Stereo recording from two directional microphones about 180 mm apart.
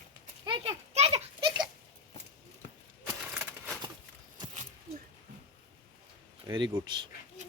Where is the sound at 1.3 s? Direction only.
25° right (ahead or behind).